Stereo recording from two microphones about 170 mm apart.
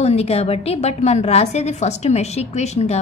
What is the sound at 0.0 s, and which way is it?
A woman's voice, 35° left (ahead or behind).